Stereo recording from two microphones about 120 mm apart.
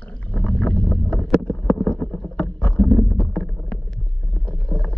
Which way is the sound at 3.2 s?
10° left (ahead or behind).